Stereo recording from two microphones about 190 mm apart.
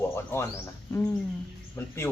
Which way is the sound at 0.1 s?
15° left (ahead or behind).